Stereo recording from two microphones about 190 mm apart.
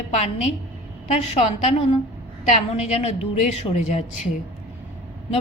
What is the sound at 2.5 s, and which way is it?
A woman's voice, 35° left (ahead or behind).